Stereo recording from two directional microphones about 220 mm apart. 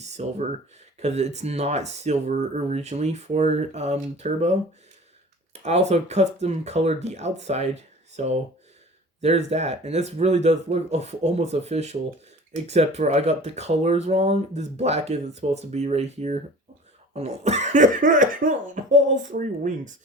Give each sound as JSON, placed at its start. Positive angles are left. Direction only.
{"t": 0.0, "sound": "speech", "side_deg": -30}
{"t": 5.5, "sound": "speech", "side_deg": -30}